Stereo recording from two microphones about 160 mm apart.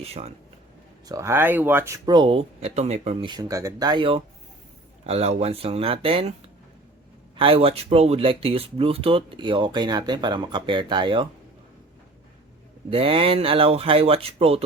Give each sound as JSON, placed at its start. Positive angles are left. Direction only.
{"t": 0.0, "sound": "speech", "side_deg": -40}
{"t": 1.0, "sound": "speech", "side_deg": -20}
{"t": 2.0, "sound": "speech", "side_deg": -30}
{"t": 3.2, "sound": "speech", "side_deg": -25}
{"t": 7.3, "sound": "speech", "side_deg": -35}
{"t": 12.9, "sound": "speech", "side_deg": -35}